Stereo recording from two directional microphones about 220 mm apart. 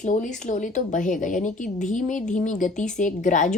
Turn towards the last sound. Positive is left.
turn(degrees=35)  # may be behind; listen again after turning